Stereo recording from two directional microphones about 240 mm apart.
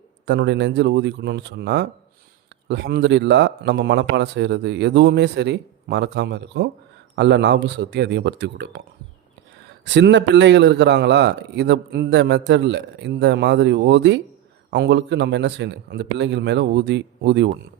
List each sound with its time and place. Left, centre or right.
0.3 s a man's voice: right
9.8 s a man's voice: right